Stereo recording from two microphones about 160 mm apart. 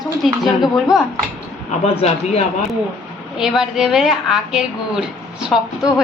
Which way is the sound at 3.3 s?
5° right (ahead or behind).